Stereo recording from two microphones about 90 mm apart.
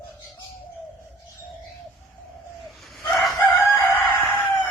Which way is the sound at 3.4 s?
25° left (ahead or behind).